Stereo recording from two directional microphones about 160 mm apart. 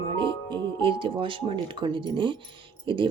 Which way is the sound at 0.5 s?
30° right (ahead or behind).